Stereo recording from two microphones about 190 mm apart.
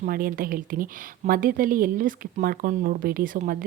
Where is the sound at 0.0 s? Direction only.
50° right (ahead or behind).